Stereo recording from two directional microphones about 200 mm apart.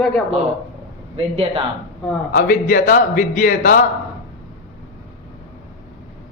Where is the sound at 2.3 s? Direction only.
45° left (ahead or behind).